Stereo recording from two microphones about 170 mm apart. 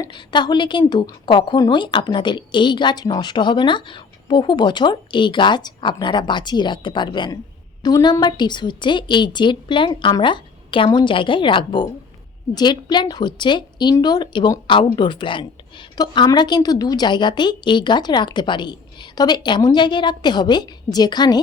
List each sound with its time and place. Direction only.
0.0 s a woman's voice: 25° left (ahead or behind)